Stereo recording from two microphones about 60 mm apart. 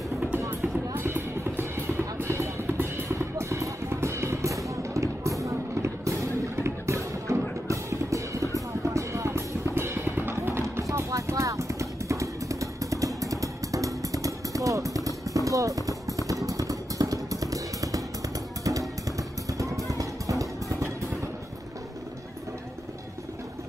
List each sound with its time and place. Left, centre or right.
0.9 s music: right
10.6 s a sound: right
18.6 s music: right